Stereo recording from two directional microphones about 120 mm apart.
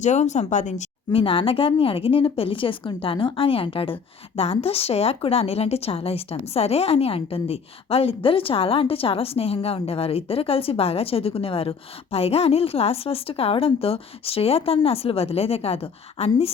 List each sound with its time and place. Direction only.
0.0 s speech: 75° left (ahead or behind)
1.1 s speech: 50° left (ahead or behind)